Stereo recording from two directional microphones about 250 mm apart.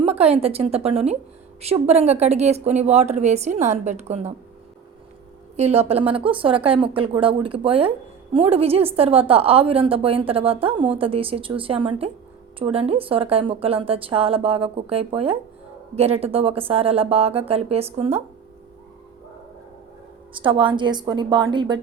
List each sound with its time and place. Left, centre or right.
0.0 s a woman's voice: right
5.5 s speech: right
20.3 s speech: centre